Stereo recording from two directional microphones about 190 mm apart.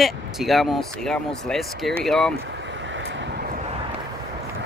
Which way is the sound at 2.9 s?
60° right (ahead or behind).